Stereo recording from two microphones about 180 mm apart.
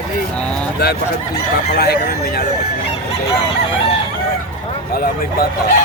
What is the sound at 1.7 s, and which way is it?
Speech, 60° left (ahead or behind).